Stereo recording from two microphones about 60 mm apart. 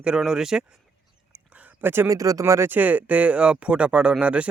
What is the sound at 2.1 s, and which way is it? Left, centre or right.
Speech, right.